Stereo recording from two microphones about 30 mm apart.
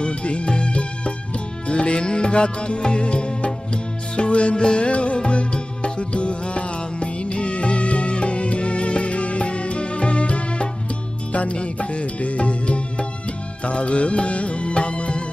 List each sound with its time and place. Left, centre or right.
0.0 s music: left